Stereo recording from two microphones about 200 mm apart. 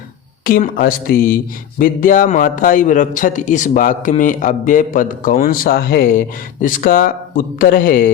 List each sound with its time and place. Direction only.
0.4 s a man's voice: 45° left (ahead or behind)